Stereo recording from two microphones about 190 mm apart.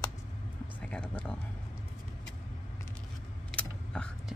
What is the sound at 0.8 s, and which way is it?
Speech, 5° left (ahead or behind).